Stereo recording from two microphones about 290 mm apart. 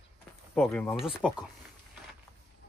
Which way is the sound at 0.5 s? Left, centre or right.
Centre.